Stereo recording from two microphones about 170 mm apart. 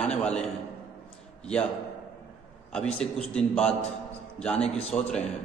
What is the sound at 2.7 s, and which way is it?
A man's voice, 5° left (ahead or behind).